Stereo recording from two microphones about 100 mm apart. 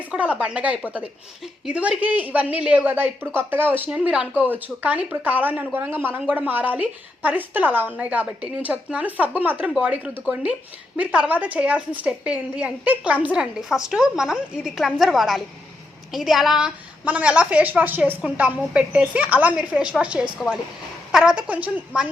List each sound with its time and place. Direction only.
0.1 s a woman's voice: 15° right (ahead or behind)